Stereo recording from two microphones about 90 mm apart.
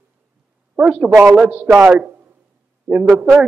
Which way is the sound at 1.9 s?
20° right (ahead or behind).